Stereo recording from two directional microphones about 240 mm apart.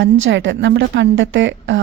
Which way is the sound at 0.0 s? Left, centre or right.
Right.